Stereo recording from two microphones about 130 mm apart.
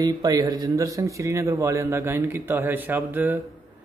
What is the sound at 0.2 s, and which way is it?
A man's voice, 30° right (ahead or behind).